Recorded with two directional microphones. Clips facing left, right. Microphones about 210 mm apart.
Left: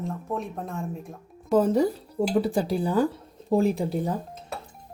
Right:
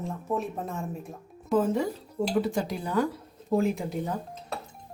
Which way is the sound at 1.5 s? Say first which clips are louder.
Left 4 dB; 40° left (ahead or behind).